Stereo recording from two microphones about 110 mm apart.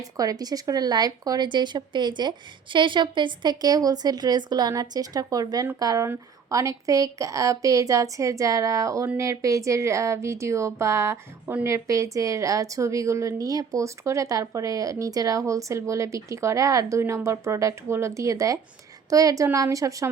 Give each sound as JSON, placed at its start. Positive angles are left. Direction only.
{"t": 0.0, "sound": "speech", "side_deg": -35}